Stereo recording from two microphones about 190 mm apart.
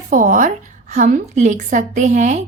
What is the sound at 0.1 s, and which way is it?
A woman's voice, 45° right (ahead or behind).